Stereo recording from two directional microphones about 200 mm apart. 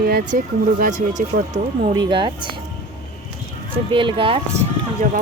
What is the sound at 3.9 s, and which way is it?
Speech, 25° right (ahead or behind).